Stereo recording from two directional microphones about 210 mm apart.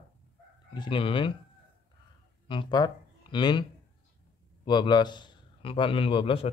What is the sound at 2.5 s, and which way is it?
A man's voice, 20° left (ahead or behind).